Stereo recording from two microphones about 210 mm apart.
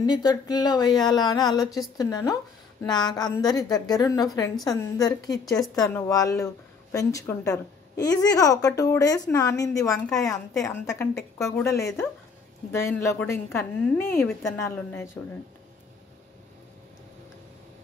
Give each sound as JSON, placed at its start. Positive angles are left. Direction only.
{"t": 0.0, "sound": "a woman's voice", "side_deg": 20}
{"t": 5.4, "sound": "a woman's voice", "side_deg": 0}
{"t": 5.8, "sound": "a woman's voice", "side_deg": 15}